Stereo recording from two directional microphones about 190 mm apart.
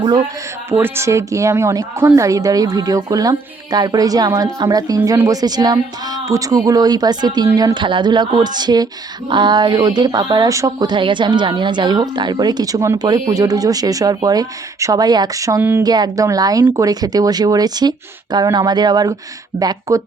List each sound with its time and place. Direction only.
0.0 s a woman's voice: 25° right (ahead or behind)